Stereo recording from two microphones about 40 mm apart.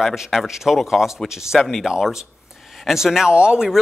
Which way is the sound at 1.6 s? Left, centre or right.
Centre.